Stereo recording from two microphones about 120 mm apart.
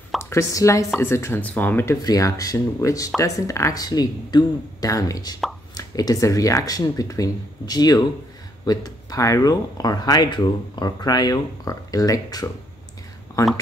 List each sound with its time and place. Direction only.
0.2 s speech: 20° left (ahead or behind)
2.0 s speech: 30° left (ahead or behind)